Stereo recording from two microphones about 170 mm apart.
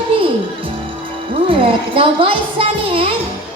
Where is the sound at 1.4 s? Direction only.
30° right (ahead or behind).